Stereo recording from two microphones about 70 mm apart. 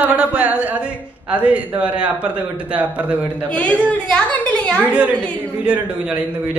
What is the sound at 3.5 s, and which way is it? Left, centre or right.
A woman's voice, centre.